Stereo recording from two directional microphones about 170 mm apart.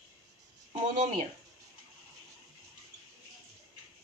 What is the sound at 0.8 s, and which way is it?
Speech, 35° right (ahead or behind).